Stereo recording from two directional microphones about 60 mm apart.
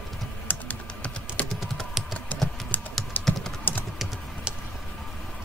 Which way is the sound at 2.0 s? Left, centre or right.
Centre.